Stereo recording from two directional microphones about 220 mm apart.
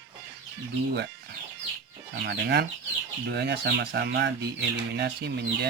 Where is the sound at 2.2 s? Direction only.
50° right (ahead or behind).